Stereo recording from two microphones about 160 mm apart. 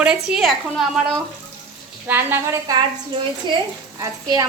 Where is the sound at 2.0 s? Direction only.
10° right (ahead or behind).